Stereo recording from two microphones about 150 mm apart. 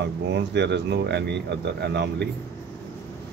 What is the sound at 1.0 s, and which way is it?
Speech, 90° right.